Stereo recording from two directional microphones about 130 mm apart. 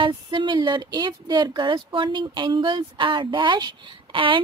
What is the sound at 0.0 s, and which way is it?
Speech, 40° right (ahead or behind).